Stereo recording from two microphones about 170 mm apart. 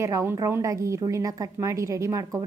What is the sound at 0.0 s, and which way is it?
Speech, 15° right (ahead or behind).